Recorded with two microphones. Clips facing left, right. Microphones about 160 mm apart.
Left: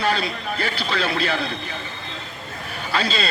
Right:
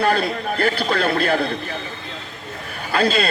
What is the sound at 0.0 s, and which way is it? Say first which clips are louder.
Speech: right 4 dB; 55° right (ahead or behind).